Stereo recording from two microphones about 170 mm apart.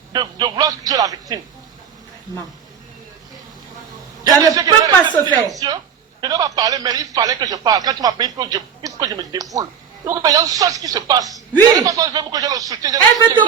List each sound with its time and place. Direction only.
0.1 s speech: 25° right (ahead or behind)
4.2 s speech: 20° right (ahead or behind)